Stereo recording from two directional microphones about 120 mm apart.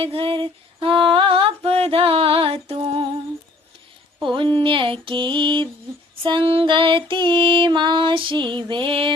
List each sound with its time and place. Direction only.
0.0 s a sound: 50° right (ahead or behind)
4.2 s music: 40° right (ahead or behind)
6.2 s female singing: 45° right (ahead or behind)